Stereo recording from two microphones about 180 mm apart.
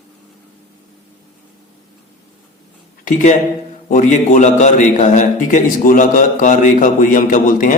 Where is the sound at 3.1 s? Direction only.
45° left (ahead or behind).